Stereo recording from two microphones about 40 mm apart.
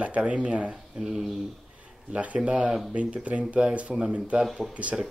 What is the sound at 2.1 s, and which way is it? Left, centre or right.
Speech, right.